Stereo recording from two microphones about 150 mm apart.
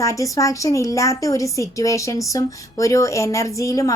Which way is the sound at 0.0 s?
20° left (ahead or behind).